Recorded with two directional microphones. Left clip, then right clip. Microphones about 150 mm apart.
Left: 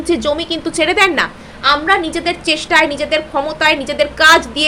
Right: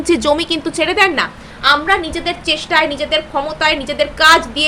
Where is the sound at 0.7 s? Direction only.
5° left (ahead or behind).